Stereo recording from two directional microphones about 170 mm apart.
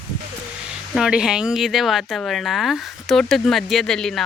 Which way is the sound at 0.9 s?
5° right (ahead or behind).